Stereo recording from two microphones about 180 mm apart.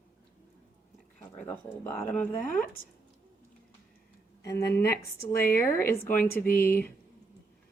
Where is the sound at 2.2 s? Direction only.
45° left (ahead or behind).